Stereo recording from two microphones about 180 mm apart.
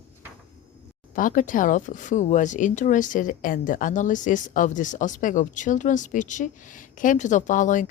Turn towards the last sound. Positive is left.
turn(degrees=45)  # may be behind; listen again after turning